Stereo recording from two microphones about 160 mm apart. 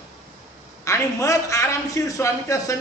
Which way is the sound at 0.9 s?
20° left (ahead or behind).